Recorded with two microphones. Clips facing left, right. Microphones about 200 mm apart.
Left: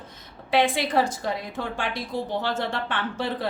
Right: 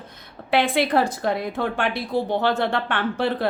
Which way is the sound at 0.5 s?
60° right (ahead or behind).